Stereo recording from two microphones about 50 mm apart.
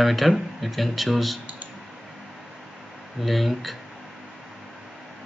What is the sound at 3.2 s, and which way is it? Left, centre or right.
Speech, centre.